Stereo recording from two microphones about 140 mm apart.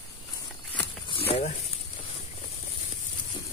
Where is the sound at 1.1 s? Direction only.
50° left (ahead or behind).